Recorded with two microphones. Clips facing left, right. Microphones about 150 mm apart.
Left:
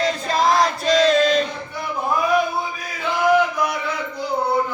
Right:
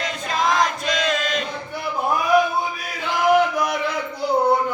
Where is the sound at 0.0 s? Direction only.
35° left (ahead or behind).